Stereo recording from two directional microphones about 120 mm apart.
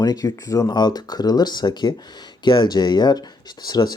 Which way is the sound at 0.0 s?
30° left (ahead or behind).